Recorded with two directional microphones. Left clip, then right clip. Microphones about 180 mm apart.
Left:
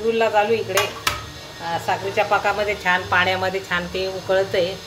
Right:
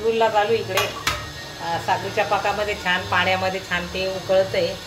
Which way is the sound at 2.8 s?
40° left (ahead or behind).